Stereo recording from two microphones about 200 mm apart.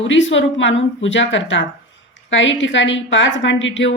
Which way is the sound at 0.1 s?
70° left (ahead or behind).